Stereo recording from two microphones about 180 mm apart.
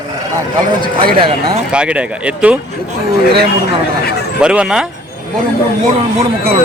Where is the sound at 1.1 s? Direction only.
30° right (ahead or behind).